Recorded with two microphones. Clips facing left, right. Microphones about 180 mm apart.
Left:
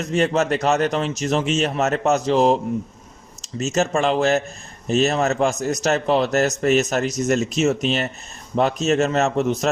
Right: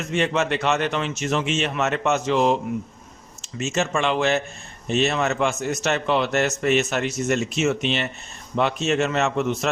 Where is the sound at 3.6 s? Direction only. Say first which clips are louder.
Left 3 dB; 40° left (ahead or behind).